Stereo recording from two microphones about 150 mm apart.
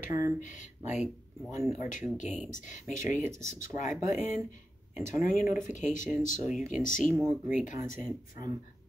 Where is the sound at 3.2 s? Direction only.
20° right (ahead or behind).